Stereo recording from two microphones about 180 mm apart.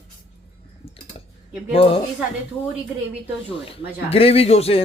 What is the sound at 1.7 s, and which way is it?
Speech, 30° left (ahead or behind).